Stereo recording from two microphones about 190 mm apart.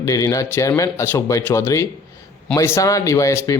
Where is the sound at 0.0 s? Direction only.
15° left (ahead or behind).